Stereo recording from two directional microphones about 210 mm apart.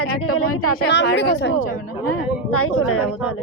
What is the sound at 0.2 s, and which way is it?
Speech, 90° left.